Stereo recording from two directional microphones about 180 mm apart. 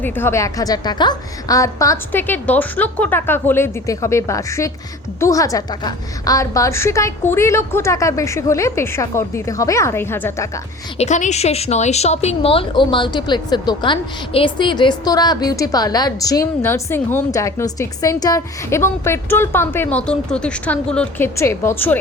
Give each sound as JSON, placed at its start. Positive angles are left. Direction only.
{"t": 0.0, "sound": "a woman's voice", "side_deg": 15}
{"t": 10.9, "sound": "a woman's voice", "side_deg": 40}